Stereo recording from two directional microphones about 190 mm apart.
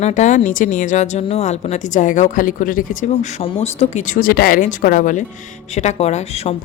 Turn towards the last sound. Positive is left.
turn(degrees=35)  # may be behind; listen again after turning